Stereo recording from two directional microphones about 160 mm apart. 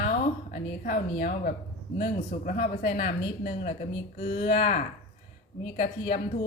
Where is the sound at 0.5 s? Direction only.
65° left (ahead or behind).